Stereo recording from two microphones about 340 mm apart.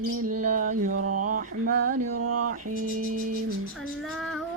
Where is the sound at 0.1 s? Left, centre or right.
Right.